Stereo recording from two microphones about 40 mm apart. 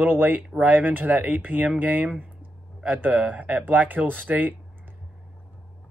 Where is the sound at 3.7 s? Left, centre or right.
Right.